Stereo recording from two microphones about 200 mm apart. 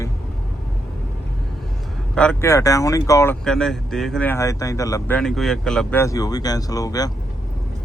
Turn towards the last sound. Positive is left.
turn(degrees=20)  # may be behind; listen again after turning